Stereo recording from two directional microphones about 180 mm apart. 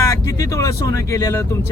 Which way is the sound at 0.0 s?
20° left (ahead or behind).